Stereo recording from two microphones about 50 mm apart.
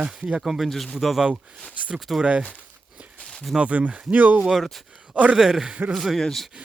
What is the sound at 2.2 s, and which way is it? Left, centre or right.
Speech, right.